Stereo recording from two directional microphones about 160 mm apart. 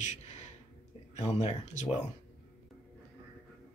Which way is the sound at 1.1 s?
45° left (ahead or behind).